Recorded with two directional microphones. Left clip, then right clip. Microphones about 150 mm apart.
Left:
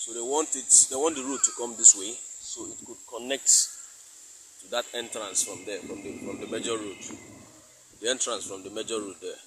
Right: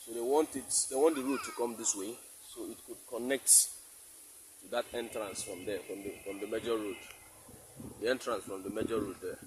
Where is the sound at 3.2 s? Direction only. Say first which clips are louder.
Left 3 dB; 30° right (ahead or behind).